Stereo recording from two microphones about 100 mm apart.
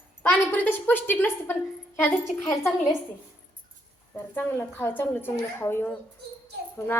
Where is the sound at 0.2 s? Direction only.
20° left (ahead or behind).